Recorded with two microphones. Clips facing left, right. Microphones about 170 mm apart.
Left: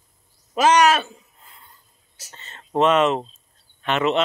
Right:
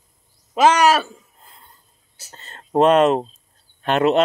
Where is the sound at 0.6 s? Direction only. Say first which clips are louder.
Right 2 dB; 30° right (ahead or behind).